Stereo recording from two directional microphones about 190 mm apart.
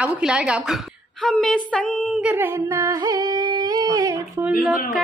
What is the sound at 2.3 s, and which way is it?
Humming, 15° right (ahead or behind).